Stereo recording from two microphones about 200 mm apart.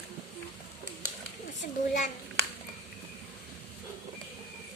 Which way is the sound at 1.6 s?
50° left (ahead or behind).